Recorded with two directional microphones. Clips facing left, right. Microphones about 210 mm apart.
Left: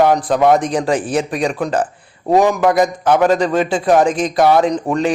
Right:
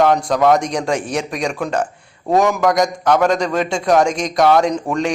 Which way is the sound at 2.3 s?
15° left (ahead or behind).